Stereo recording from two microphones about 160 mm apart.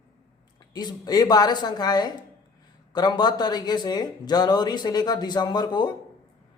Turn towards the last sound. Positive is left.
turn(degrees=25)  # may be behind; listen again after turning